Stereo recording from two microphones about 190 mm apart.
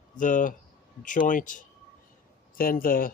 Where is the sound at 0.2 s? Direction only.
45° left (ahead or behind).